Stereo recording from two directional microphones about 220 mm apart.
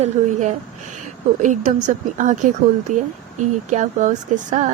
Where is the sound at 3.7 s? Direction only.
35° right (ahead or behind).